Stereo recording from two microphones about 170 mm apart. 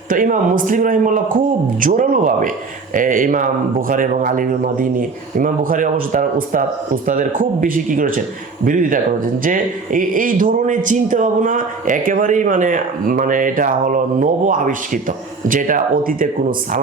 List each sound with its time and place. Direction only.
0.1 s a man's voice: 55° right (ahead or behind)